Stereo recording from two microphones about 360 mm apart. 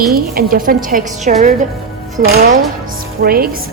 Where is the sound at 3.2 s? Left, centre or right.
Right.